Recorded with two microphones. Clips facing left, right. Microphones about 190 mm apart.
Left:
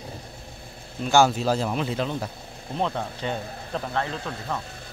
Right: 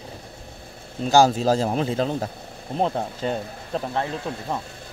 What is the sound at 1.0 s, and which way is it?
Speech, 35° right (ahead or behind).